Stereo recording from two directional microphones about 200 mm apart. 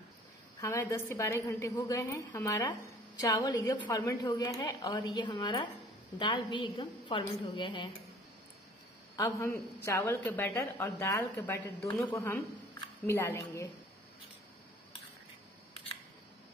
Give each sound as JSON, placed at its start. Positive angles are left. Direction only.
{"t": 0.6, "sound": "a woman's voice", "side_deg": 15}
{"t": 9.1, "sound": "a woman's voice", "side_deg": 15}